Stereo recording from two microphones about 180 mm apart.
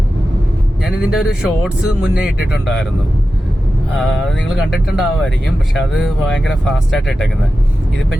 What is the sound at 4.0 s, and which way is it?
Speech, centre (ahead or behind).